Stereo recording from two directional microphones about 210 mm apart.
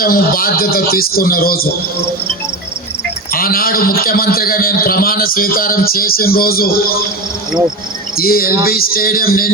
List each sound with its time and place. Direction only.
0.0 s a man's voice: 45° left (ahead or behind)
3.3 s a man's voice: 45° left (ahead or behind)
8.2 s a man's voice: 45° left (ahead or behind)